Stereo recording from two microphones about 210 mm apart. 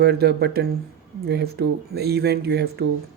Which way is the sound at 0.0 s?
50° right (ahead or behind).